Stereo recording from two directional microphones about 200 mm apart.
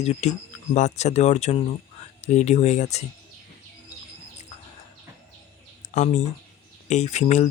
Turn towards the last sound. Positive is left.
turn(degrees=35)  # may be behind; listen again after turning